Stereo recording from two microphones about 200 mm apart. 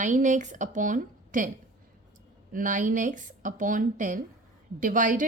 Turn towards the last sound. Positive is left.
turn(degrees=-40)  # may be behind; listen again after turning